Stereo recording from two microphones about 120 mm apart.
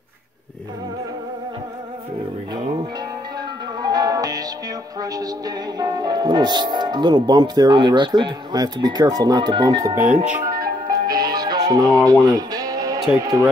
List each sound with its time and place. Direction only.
3.8 s music: 35° right (ahead or behind)
5.8 s speech: 35° right (ahead or behind)
9.9 s speech: 10° right (ahead or behind)
10.4 s music: 35° right (ahead or behind)